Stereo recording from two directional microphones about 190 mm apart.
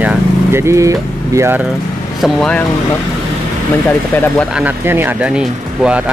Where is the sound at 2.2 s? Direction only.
5° left (ahead or behind).